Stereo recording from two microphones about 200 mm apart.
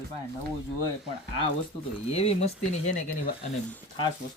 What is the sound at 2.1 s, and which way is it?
Speech, 30° left (ahead or behind).